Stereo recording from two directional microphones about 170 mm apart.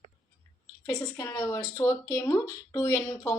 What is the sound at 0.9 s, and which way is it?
A woman's voice, 20° left (ahead or behind).